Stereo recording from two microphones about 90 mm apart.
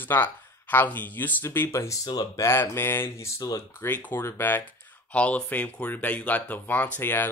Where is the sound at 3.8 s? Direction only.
25° left (ahead or behind).